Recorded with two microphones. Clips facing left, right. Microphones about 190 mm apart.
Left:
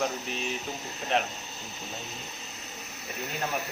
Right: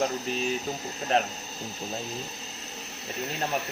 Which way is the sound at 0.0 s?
35° right (ahead or behind).